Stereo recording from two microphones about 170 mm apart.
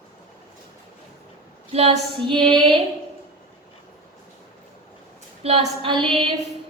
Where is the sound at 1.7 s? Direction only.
35° right (ahead or behind).